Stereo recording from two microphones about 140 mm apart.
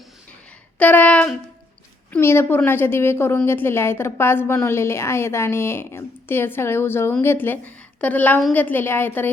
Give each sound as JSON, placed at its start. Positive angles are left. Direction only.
{"t": 0.8, "sound": "a woman's voice", "side_deg": 10}